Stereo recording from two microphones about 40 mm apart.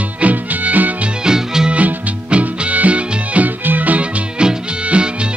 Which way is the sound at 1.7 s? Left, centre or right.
Right.